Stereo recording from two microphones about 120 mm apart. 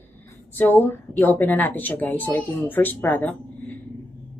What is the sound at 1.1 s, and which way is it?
Speech, 15° left (ahead or behind).